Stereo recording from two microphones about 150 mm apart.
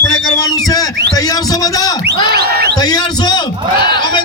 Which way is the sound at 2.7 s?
25° left (ahead or behind).